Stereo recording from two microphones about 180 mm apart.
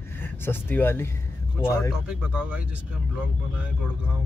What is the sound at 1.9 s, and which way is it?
Speech, 5° right (ahead or behind).